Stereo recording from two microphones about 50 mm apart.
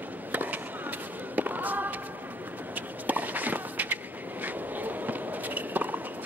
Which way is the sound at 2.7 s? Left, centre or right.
Right.